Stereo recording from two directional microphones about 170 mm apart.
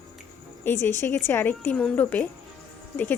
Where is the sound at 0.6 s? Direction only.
15° left (ahead or behind).